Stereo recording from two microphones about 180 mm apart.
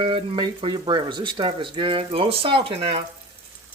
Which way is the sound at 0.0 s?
25° right (ahead or behind).